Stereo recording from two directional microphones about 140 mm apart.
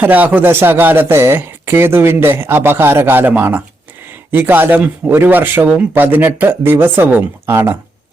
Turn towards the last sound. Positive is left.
turn(degrees=-15)  # may be behind; listen again after turning